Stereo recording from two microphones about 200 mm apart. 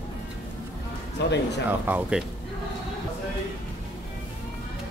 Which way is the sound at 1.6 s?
10° right (ahead or behind).